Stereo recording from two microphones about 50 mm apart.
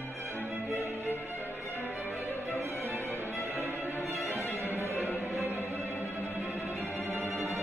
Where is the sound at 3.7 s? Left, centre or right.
Left.